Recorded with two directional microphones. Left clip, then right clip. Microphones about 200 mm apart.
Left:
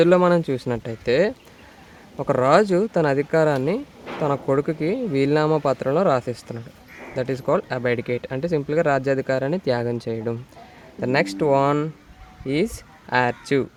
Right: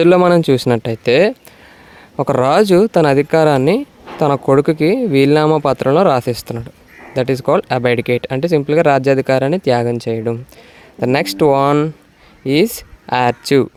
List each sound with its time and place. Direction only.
0.0 s speech: 40° right (ahead or behind)